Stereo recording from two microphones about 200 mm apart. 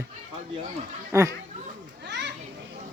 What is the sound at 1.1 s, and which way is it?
Speech, 15° right (ahead or behind).